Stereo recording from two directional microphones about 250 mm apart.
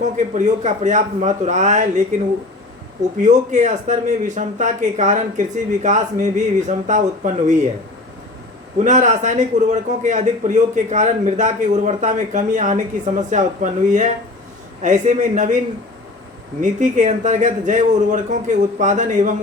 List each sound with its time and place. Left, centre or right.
0.0 s a man's voice: right
8.8 s a man's voice: right
16.6 s a man's voice: right